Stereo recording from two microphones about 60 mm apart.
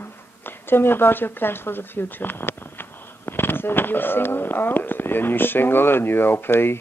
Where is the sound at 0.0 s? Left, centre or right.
Left.